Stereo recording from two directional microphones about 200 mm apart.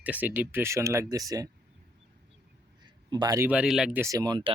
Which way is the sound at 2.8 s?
20° right (ahead or behind).